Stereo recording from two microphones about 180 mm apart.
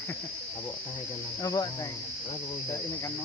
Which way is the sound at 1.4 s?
20° left (ahead or behind).